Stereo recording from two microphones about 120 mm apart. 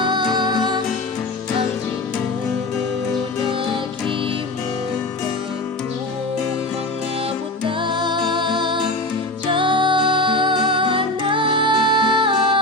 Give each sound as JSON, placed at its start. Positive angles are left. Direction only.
{"t": 0.0, "sound": "music", "side_deg": -40}
{"t": 7.6, "sound": "music", "side_deg": -40}